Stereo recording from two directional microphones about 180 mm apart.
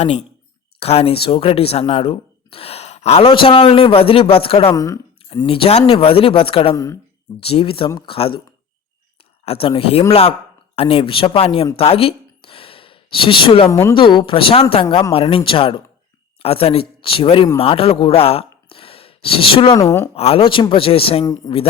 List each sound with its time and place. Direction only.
0.0 s speech: 40° left (ahead or behind)
4.7 s speech: 20° left (ahead or behind)
5.5 s speech: 30° left (ahead or behind)
6.7 s speech: 20° left (ahead or behind)
7.4 s speech: 30° left (ahead or behind)
9.4 s speech: 30° left (ahead or behind)
12.5 s sigh: 30° left (ahead or behind)
13.7 s speech: 15° left (ahead or behind)
13.9 s speech: 25° left (ahead or behind)
20.1 s speech: 35° left (ahead or behind)
21.5 s speech: 20° left (ahead or behind)